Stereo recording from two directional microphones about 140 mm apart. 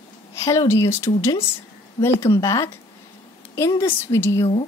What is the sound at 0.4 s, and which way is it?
A woman's voice, 20° left (ahead or behind).